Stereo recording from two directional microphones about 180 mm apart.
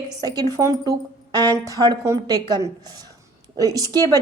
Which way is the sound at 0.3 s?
20° right (ahead or behind).